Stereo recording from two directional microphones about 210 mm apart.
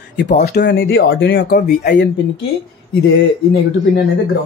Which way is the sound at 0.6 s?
55° left (ahead or behind).